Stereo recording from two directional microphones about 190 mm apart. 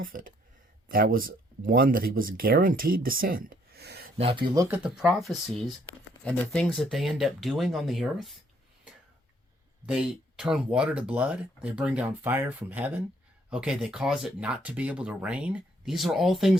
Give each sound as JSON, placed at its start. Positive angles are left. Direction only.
{"t": 0.0, "sound": "speech", "side_deg": -45}
{"t": 4.2, "sound": "speech", "side_deg": -30}
{"t": 4.5, "sound": "speech", "side_deg": -20}
{"t": 4.8, "sound": "speech", "side_deg": 0}
{"t": 9.8, "sound": "speech", "side_deg": -5}